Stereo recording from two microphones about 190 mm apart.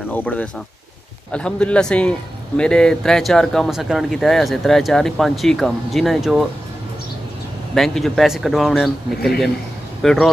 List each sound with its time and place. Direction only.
0.1 s a man's voice: 10° left (ahead or behind)
7.7 s a man's voice: centre (ahead or behind)